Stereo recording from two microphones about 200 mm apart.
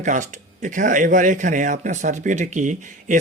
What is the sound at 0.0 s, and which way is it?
Speech, 40° right (ahead or behind).